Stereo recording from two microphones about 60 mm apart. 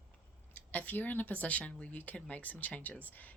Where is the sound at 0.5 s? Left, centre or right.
Left.